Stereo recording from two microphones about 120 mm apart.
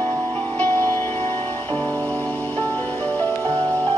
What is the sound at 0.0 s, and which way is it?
Music, 15° left (ahead or behind).